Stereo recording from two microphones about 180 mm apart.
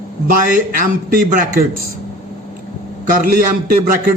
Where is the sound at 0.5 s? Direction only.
50° right (ahead or behind).